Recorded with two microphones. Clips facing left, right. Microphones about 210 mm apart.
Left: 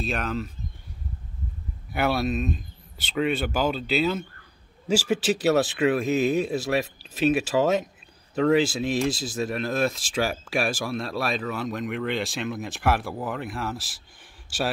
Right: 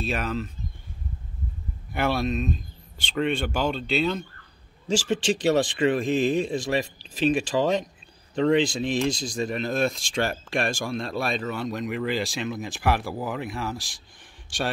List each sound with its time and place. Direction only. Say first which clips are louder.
0.0 s speech: even; centre (ahead or behind)
1.9 s speech: left 1 dB; centre (ahead or behind)